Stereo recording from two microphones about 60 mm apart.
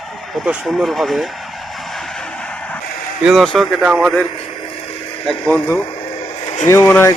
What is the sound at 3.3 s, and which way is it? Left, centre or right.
Speech, centre.